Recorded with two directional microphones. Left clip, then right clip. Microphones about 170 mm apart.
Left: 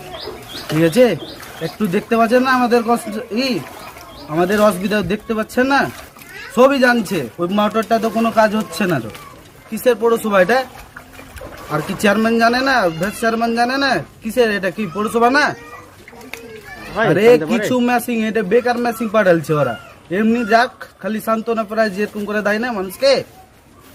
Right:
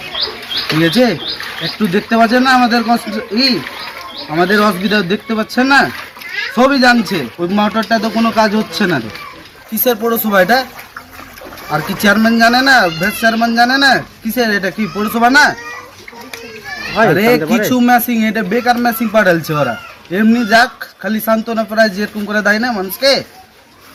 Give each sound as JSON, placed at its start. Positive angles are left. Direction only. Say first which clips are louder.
{"t": 0.8, "sound": "a man's voice", "louder": "left 1 dB", "side_deg": 35}
{"t": 10.1, "sound": "a man's voice", "louder": "right 5 dB", "side_deg": 35}
{"t": 11.7, "sound": "a man's voice", "louder": "right 4 dB", "side_deg": 35}
{"t": 17.1, "sound": "a man's voice", "louder": "left 4 dB", "side_deg": 35}